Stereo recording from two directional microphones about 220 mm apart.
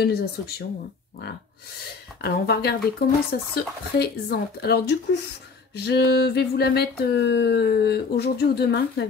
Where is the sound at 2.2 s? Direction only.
50° left (ahead or behind).